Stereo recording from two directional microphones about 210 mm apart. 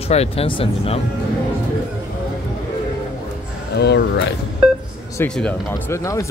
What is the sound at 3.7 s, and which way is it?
Speech, 50° left (ahead or behind).